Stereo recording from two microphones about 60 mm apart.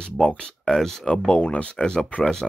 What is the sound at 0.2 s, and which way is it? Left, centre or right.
Speech, centre.